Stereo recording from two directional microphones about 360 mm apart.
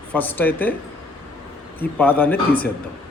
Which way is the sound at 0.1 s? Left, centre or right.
Centre.